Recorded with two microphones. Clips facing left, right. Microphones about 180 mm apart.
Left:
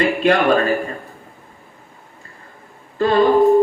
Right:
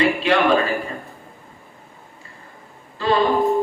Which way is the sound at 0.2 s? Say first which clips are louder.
Left 2 dB; 50° left (ahead or behind).